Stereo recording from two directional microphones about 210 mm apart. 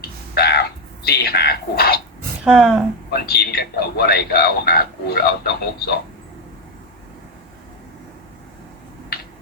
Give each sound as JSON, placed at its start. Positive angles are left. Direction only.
{"t": 0.3, "sound": "throat clearing", "side_deg": 50}
{"t": 2.4, "sound": "speech", "side_deg": -5}
{"t": 3.1, "sound": "a man's voice", "side_deg": 50}